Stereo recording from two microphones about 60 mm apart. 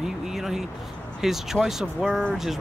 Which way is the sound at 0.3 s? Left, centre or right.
Centre.